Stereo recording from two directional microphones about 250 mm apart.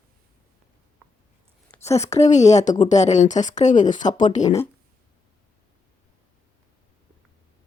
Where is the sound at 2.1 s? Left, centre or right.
Left.